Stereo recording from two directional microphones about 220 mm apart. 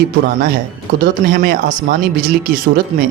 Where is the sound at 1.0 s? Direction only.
40° right (ahead or behind).